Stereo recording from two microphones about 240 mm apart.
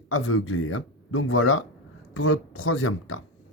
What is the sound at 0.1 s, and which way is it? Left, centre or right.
Speech, left.